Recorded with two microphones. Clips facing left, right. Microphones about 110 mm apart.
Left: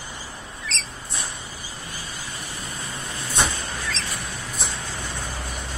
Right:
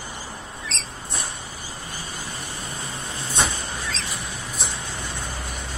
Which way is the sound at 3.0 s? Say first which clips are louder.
Even; 25° right (ahead or behind).